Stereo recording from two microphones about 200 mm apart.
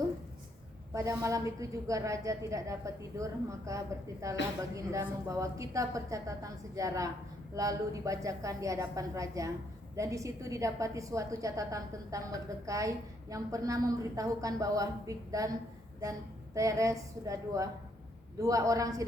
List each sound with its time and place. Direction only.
0.9 s a woman's voice: 15° right (ahead or behind)
16.6 s a woman's voice: 15° right (ahead or behind)